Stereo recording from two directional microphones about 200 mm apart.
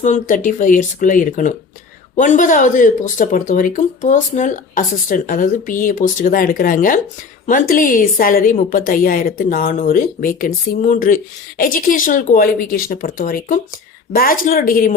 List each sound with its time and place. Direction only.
0.0 s a woman's voice: 40° left (ahead or behind)